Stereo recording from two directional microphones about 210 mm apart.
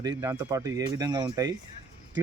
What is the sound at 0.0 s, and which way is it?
Speech, 15° right (ahead or behind).